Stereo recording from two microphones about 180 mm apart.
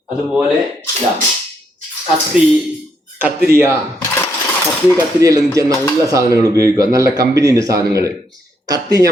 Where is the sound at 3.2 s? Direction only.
10° right (ahead or behind).